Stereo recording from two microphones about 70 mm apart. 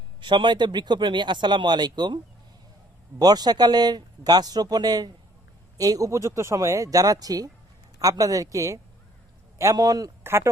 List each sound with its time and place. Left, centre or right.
0.3 s speech: right
3.2 s a man's voice: right
5.7 s speech: right
10.2 s speech: right